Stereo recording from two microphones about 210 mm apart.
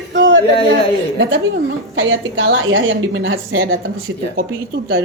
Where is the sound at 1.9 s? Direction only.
65° right (ahead or behind).